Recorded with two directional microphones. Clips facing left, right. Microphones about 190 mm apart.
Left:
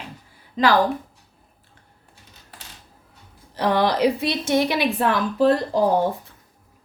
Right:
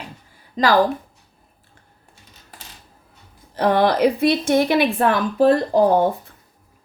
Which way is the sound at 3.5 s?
50° right (ahead or behind).